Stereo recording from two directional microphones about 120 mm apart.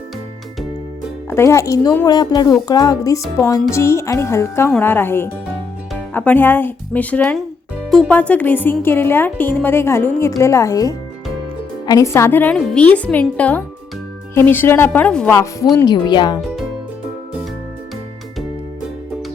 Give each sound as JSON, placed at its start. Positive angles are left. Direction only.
{"t": 1.3, "sound": "music", "side_deg": 20}
{"t": 2.0, "sound": "speech", "side_deg": 35}
{"t": 3.5, "sound": "music", "side_deg": 25}
{"t": 4.8, "sound": "speech", "side_deg": 15}
{"t": 15.3, "sound": "music", "side_deg": 25}
{"t": 15.7, "sound": "speech", "side_deg": 35}